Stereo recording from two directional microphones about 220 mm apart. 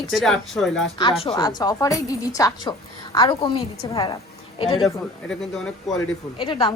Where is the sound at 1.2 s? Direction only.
25° left (ahead or behind).